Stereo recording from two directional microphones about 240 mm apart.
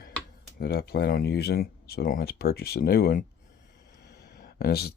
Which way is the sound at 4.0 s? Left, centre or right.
Left.